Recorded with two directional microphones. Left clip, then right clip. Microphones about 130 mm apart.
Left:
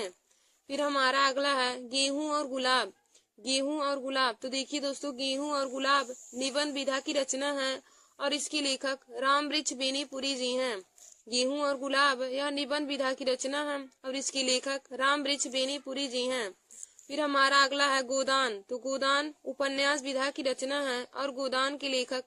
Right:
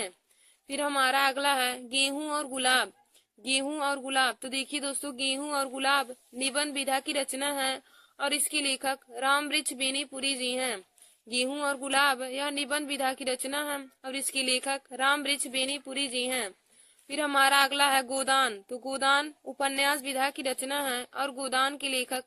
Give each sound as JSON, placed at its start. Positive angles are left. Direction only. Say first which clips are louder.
{"t": 0.7, "sound": "speech", "louder": "right 1 dB", "side_deg": -15}